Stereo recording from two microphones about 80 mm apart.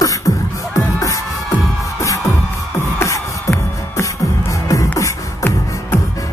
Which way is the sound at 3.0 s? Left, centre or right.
Left.